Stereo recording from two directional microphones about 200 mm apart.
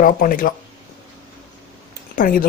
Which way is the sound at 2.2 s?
45° left (ahead or behind).